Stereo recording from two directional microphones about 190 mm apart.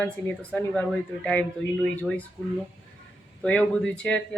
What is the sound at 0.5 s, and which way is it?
Speech, 5° left (ahead or behind).